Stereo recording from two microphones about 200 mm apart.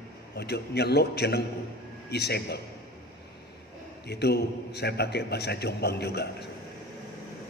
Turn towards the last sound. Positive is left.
turn(degrees=55)  # may be behind; listen again after turning